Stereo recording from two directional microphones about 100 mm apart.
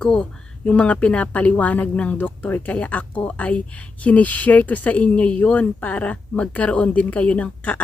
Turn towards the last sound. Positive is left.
turn(degrees=15)  # may be behind; listen again after turning